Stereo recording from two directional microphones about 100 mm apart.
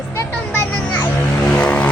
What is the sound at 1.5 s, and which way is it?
Vehicle, 15° left (ahead or behind).